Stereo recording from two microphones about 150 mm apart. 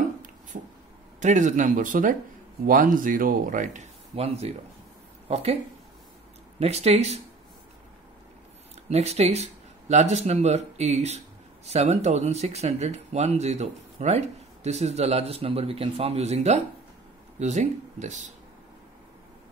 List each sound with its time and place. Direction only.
1.2 s speech: 55° right (ahead or behind)
6.6 s speech: 45° right (ahead or behind)
8.8 s speech: 45° right (ahead or behind)